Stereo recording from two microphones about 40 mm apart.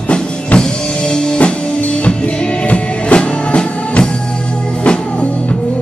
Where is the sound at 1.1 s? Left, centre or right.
Centre.